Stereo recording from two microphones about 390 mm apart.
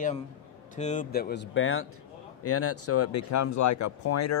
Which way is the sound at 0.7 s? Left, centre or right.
Centre.